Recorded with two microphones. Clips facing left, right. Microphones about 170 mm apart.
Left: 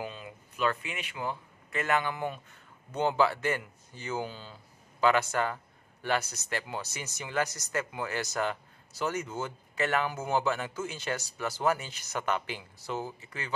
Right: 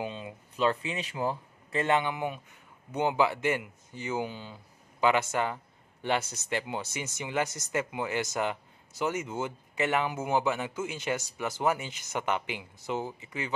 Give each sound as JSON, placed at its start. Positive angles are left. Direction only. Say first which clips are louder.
{"t": 0.0, "sound": "speech", "louder": "right 3 dB", "side_deg": -20}